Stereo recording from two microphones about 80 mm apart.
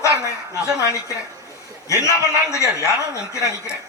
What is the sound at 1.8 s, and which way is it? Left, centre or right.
A man's voice, left.